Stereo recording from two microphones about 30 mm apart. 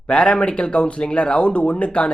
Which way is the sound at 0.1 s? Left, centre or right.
Left.